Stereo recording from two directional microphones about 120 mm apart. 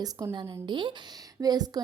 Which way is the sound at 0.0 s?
25° right (ahead or behind).